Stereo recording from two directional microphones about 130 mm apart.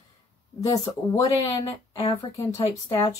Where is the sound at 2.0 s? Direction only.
45° left (ahead or behind).